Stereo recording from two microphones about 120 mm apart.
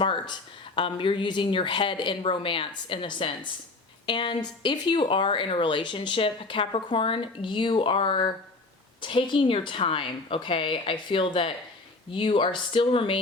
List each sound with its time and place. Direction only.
0.0 s speech: 40° left (ahead or behind)